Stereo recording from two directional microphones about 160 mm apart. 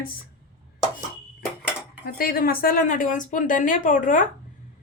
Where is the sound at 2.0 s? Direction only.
65° left (ahead or behind).